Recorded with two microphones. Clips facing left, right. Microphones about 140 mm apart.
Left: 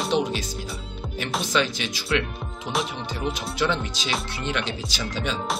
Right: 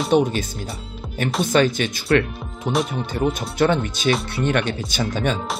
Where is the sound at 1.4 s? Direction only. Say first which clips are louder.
Right 8 dB; 50° right (ahead or behind).